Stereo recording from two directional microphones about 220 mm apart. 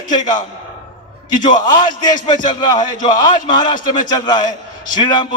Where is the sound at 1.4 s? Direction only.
20° left (ahead or behind).